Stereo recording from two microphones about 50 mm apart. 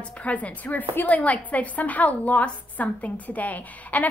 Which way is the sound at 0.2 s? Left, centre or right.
Left.